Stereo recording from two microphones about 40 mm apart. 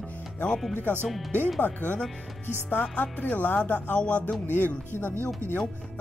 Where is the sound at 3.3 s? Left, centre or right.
Left.